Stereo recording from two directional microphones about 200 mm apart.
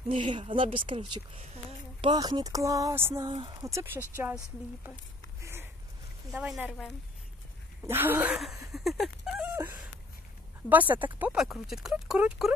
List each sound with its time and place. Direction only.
0.1 s speech: 25° right (ahead or behind)
3.3 s speech: 25° right (ahead or behind)
5.4 s a sound: 10° right (ahead or behind)
6.3 s speech: 5° right (ahead or behind)
8.7 s a sound: centre (ahead or behind)
10.7 s speech: 10° right (ahead or behind)